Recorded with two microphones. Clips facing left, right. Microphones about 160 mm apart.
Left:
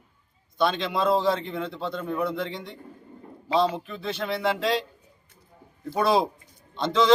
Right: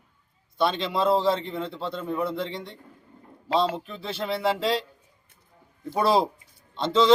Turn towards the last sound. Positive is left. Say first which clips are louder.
# right 1 dB
turn(degrees=0)  # may be behind; listen again after turning